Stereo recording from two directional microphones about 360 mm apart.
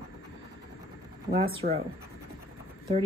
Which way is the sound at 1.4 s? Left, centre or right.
Centre.